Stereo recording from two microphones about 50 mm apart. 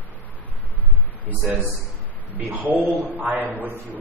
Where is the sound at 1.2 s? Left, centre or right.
Right.